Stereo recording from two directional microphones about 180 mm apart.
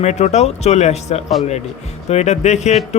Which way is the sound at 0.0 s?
40° left (ahead or behind).